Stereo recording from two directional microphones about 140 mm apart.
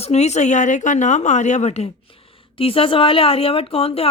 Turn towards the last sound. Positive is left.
turn(degrees=45)  # may be behind; listen again after turning